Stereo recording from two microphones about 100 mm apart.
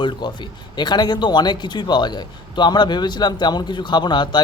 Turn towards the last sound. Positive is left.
turn(degrees=45)  # may be behind; listen again after turning